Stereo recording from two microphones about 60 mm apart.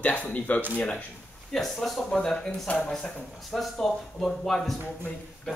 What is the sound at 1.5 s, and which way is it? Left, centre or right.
A woman's voice, centre.